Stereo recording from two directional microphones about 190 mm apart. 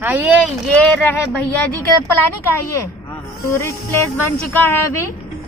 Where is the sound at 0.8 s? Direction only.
10° left (ahead or behind).